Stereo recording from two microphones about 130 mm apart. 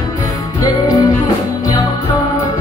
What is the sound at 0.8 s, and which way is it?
Music, 30° left (ahead or behind).